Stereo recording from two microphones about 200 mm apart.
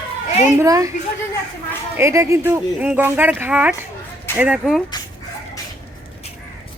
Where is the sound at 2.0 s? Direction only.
15° right (ahead or behind).